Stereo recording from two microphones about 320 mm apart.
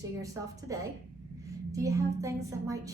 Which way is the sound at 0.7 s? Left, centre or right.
Centre.